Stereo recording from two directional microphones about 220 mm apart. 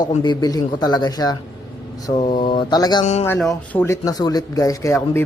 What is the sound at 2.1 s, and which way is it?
Speech, 30° left (ahead or behind).